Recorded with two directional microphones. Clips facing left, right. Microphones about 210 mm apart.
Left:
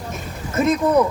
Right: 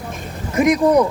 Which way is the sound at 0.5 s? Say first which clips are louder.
Right 3 dB; 15° right (ahead or behind).